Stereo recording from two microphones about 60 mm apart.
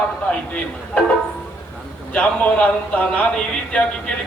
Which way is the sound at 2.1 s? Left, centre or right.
Left.